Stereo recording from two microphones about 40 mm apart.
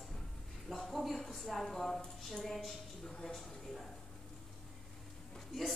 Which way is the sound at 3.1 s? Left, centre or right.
Centre.